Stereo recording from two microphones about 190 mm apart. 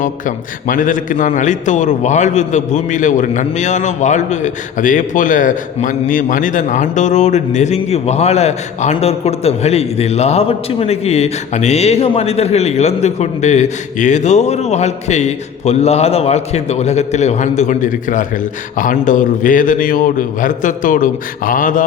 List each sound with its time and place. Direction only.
0.0 s a man's voice: 45° left (ahead or behind)